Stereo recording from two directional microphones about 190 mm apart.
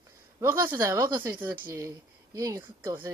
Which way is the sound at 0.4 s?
15° right (ahead or behind).